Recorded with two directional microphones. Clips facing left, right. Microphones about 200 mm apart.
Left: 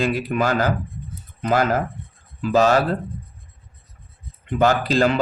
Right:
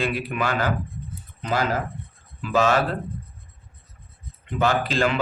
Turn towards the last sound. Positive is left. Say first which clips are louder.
# left 4 dB
turn(degrees=40)  # may be behind; listen again after turning